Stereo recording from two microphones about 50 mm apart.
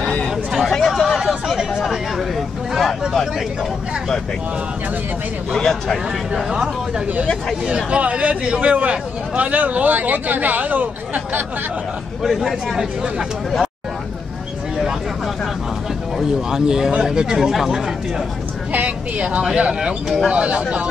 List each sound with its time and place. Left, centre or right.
0.6 s chatter: centre
1.8 s speech: centre
5.6 s speech: centre
6.3 s speech: centre
7.6 s speech: right
12.2 s speech: centre
16.2 s speech: centre
18.7 s speech: right